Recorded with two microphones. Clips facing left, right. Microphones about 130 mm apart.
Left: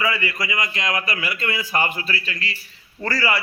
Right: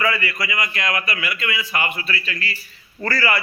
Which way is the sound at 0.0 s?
20° left (ahead or behind).